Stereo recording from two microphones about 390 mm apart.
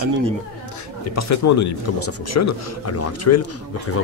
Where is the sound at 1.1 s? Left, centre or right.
Left.